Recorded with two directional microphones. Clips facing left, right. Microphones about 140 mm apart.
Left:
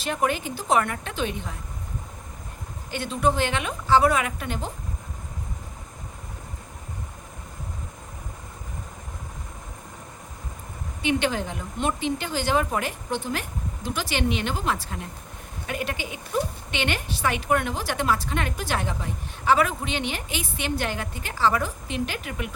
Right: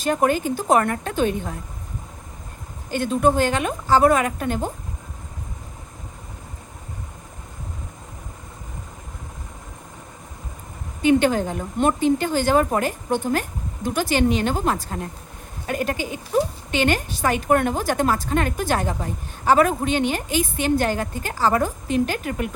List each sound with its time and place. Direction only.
0.0 s a woman's voice: 45° right (ahead or behind)
2.9 s a woman's voice: 45° right (ahead or behind)
11.0 s a woman's voice: 45° right (ahead or behind)